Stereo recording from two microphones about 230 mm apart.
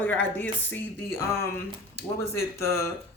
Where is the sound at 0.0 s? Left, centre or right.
Centre.